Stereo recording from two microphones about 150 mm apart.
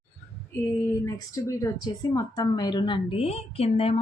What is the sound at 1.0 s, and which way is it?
A woman's voice, 20° left (ahead or behind).